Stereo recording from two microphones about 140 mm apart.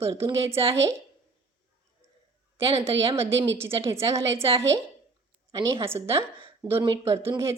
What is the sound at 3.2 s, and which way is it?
A woman's voice, 20° right (ahead or behind).